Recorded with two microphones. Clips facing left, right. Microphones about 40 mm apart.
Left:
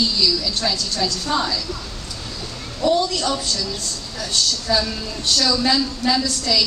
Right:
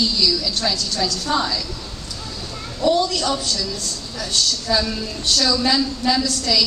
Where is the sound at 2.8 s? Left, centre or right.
Centre.